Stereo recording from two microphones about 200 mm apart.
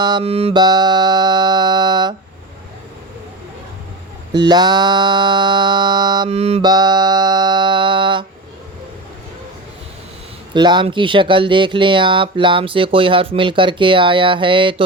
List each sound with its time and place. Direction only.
0.0 s speech: 25° right (ahead or behind)
4.3 s speech: 20° right (ahead or behind)
6.7 s speech: 20° right (ahead or behind)
10.5 s speech: 20° right (ahead or behind)